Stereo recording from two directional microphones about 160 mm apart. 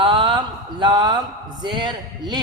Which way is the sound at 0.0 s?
30° right (ahead or behind).